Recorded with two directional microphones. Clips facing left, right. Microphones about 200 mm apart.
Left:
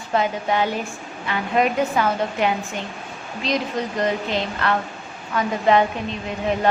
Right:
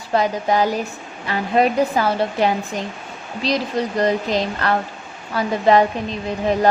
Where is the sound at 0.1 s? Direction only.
40° right (ahead or behind).